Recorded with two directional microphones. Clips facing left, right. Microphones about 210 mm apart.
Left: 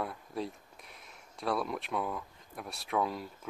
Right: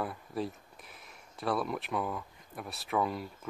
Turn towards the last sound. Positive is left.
turn(degrees=0)  # may be behind; listen again after turning